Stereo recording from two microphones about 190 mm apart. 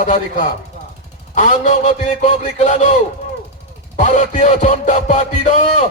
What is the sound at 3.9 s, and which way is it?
Music, 40° left (ahead or behind).